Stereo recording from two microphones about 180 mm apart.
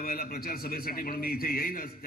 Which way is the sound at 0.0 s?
55° left (ahead or behind).